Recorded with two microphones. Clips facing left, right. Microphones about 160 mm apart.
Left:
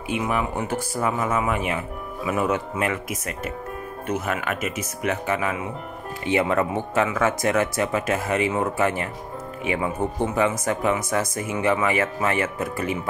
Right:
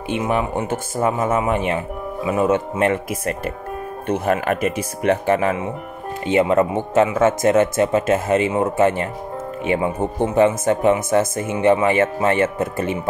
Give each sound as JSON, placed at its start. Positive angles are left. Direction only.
{"t": 0.1, "sound": "speech", "side_deg": -30}